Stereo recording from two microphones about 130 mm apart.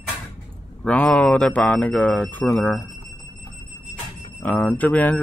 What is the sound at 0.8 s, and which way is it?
Speech, 10° left (ahead or behind).